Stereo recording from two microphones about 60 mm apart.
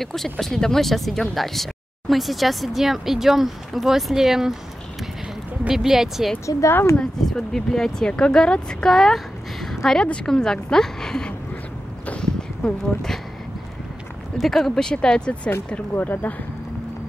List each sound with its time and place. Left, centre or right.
0.0 s speech: centre
5.7 s speech: centre
6.6 s speech: left
7.0 s a woman's voice: centre
12.2 s a sound: centre
14.4 s a woman's voice: centre
15.9 s speech: left